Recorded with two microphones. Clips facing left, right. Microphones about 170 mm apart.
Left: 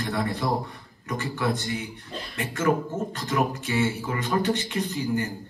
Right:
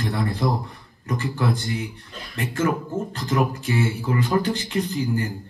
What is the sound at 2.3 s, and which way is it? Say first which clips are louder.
Speech: right 1 dB; 30° right (ahead or behind).